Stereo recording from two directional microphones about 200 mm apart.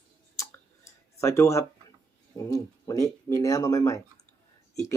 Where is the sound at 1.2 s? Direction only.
15° left (ahead or behind).